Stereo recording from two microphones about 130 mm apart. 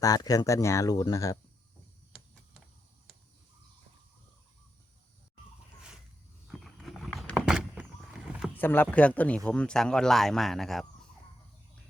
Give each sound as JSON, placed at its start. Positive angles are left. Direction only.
{"t": 0.0, "sound": "speech", "side_deg": 30}
{"t": 6.5, "sound": "horse", "side_deg": 5}
{"t": 8.5, "sound": "speech", "side_deg": 15}